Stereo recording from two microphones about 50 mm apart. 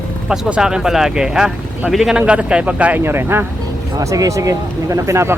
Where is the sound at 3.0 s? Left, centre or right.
Right.